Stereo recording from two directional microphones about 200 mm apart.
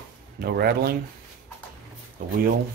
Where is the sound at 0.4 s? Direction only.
50° right (ahead or behind).